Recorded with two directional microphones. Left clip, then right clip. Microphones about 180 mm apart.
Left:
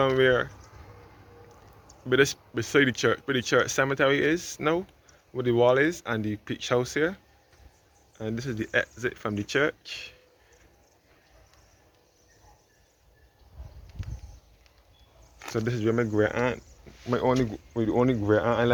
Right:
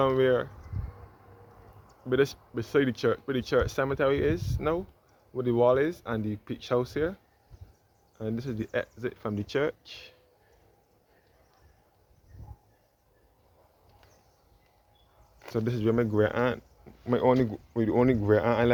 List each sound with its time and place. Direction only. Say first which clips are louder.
0.0 s speech: left 2 dB; 10° right (ahead or behind)
2.0 s speech: left 3 dB; centre (ahead or behind)
8.2 s speech: left 2 dB; 10° right (ahead or behind)
15.4 s speech: left 1 dB; 15° right (ahead or behind)